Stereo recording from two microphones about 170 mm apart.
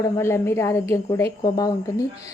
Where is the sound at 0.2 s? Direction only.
15° left (ahead or behind).